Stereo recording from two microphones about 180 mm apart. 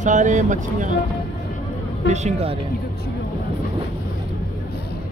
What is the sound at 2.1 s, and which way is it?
Speech, 40° right (ahead or behind).